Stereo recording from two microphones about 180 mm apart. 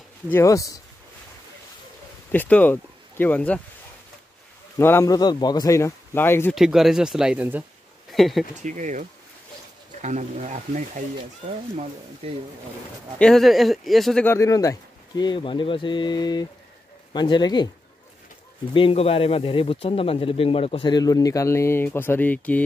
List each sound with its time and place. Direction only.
0.3 s speech: 15° left (ahead or behind)
2.3 s speech: 10° left (ahead or behind)
4.7 s speech: 15° left (ahead or behind)
6.5 s speech: centre (ahead or behind)
8.6 s speech: 45° right (ahead or behind)
10.0 s speech: 40° right (ahead or behind)
12.2 s speech: 35° right (ahead or behind)
13.2 s speech: centre (ahead or behind)
14.2 s speech: 15° left (ahead or behind)
18.7 s speech: 30° left (ahead or behind); by 22.6 s 10° left (ahead or behind)